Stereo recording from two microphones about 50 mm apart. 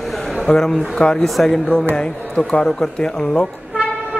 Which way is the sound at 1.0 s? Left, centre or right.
Centre.